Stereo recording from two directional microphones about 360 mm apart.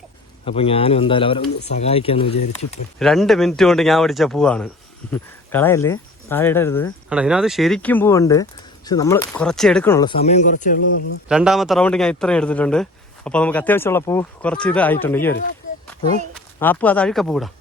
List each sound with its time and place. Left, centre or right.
0.4 s speech: centre
3.0 s a man's voice: centre; by 10.8 s left
11.3 s a man's voice: centre
16.6 s a man's voice: centre